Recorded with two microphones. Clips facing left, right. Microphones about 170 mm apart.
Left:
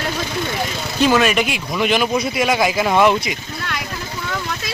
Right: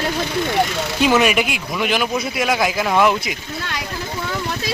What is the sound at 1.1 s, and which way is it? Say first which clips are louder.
Speech: even; 15° right (ahead or behind).